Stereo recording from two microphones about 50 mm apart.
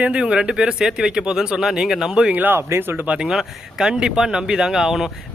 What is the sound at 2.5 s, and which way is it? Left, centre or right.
Speech, right.